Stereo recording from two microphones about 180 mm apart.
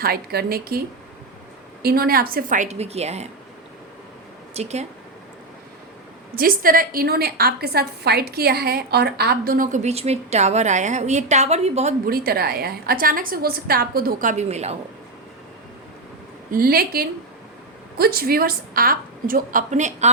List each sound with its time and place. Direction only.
0.0 s a woman's voice: 60° right (ahead or behind)
1.8 s a woman's voice: 55° right (ahead or behind); by 3.2 s 35° right (ahead or behind)
4.5 s speech: 35° right (ahead or behind)
6.3 s a woman's voice: 55° right (ahead or behind); by 11.9 s 35° right (ahead or behind)
12.0 s a woman's voice: 55° right (ahead or behind); by 14.8 s 35° right (ahead or behind)
16.5 s a woman's voice: 55° right (ahead or behind)